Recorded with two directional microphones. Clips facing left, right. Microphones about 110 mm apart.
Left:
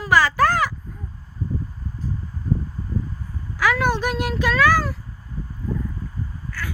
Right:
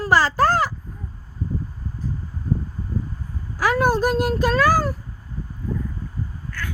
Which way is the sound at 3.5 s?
40° right (ahead or behind).